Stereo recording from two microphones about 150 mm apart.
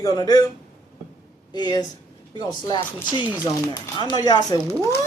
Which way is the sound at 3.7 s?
30° left (ahead or behind).